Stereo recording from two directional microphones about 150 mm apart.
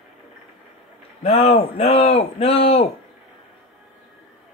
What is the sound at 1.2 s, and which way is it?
Speech, 40° left (ahead or behind).